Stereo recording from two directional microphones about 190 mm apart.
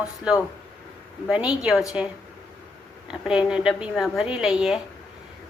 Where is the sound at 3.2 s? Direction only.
5° right (ahead or behind).